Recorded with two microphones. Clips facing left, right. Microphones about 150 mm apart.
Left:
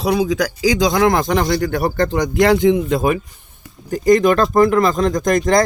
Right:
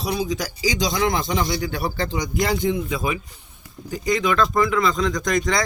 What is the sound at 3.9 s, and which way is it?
Speech, 50° left (ahead or behind).